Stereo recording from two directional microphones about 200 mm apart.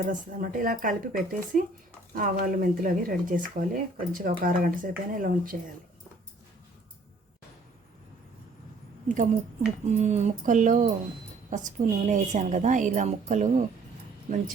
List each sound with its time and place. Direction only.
0.0 s speech: 40° right (ahead or behind)
9.0 s a woman's voice: 40° right (ahead or behind)